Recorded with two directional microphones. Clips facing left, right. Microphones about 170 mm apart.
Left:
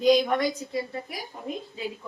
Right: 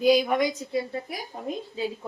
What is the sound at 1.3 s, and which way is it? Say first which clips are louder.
Speech: right 5 dB; 35° right (ahead or behind).